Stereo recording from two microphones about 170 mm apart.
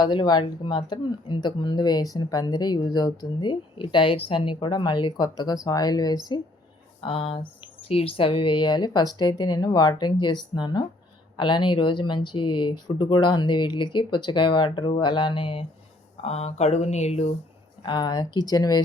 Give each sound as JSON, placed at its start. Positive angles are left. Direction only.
{"t": 0.0, "sound": "speech", "side_deg": 30}
{"t": 17.8, "sound": "speech", "side_deg": 25}